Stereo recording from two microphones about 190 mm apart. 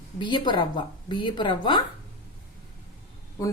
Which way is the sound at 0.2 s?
25° left (ahead or behind).